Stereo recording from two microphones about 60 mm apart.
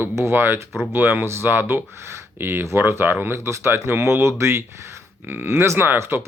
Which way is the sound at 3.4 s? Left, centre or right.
Right.